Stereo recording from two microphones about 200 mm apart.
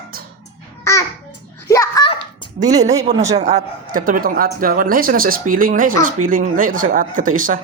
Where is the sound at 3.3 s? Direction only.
35° right (ahead or behind).